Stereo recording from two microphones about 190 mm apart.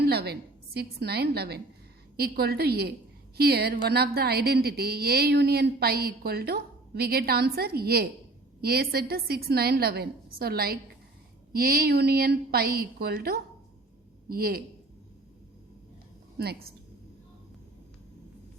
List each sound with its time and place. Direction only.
0.0 s a woman's voice: 60° right (ahead or behind)